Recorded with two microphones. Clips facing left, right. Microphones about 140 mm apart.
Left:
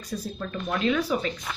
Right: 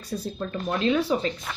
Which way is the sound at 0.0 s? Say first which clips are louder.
Right 2 dB; 30° right (ahead or behind).